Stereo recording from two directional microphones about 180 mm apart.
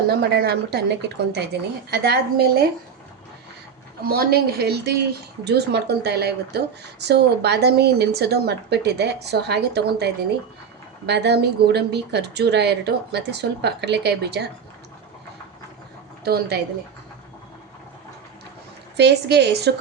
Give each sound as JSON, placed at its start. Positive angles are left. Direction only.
{"t": 0.1, "sound": "a woman's voice", "side_deg": -65}
{"t": 1.9, "sound": "a woman's voice", "side_deg": -60}
{"t": 4.0, "sound": "a woman's voice", "side_deg": -60}
{"t": 16.2, "sound": "a woman's voice", "side_deg": -65}
{"t": 18.9, "sound": "speech", "side_deg": -65}